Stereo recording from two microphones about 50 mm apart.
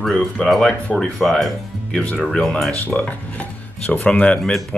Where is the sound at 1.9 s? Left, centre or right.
Left.